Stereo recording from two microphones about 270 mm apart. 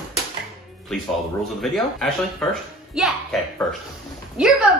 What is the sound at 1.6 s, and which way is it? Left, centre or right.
Speech, centre.